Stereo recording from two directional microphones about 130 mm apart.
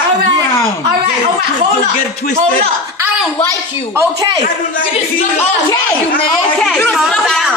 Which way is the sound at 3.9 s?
25° right (ahead or behind).